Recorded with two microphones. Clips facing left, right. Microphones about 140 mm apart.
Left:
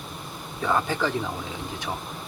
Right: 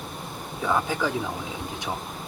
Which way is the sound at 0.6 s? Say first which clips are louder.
Even; 5° right (ahead or behind).